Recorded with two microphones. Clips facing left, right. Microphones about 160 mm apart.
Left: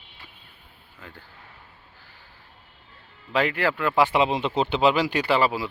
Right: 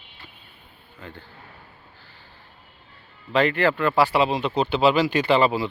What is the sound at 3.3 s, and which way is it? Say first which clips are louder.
Speech: right 3 dB; 10° left (ahead or behind).